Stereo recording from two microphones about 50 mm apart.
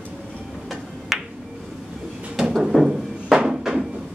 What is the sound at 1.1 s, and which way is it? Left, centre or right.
Music, centre.